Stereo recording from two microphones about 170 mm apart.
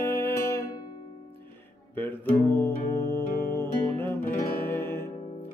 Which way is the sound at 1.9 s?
10° left (ahead or behind).